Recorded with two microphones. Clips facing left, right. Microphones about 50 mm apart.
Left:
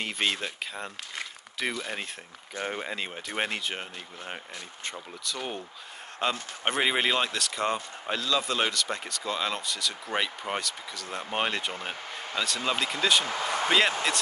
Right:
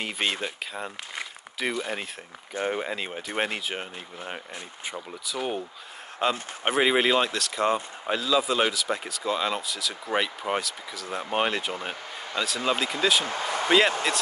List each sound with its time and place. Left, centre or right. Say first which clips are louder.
0.0 s speech: right 1 dB; centre
13.2 s speech: right 1 dB; right
13.7 s speech: right 3 dB; centre